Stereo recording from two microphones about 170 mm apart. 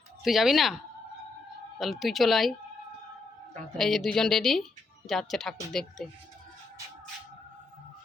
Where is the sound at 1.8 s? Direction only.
Centre (ahead or behind).